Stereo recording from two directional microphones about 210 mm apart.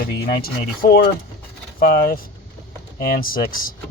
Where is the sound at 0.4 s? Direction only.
45° left (ahead or behind).